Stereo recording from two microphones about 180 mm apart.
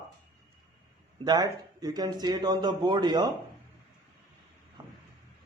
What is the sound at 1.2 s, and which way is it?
A man's voice, 20° right (ahead or behind).